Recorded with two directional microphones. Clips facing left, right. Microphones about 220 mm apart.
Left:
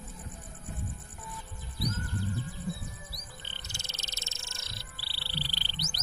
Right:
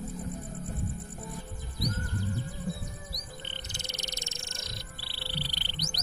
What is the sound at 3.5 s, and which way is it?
Music, 20° right (ahead or behind).